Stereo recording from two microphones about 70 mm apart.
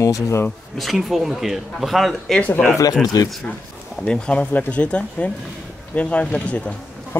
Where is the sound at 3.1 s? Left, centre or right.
Left.